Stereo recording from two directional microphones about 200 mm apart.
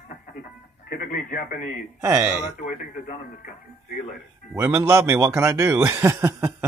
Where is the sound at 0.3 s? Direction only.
45° left (ahead or behind).